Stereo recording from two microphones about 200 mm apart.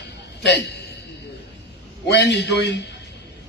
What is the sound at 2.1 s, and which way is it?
Speech, 60° left (ahead or behind).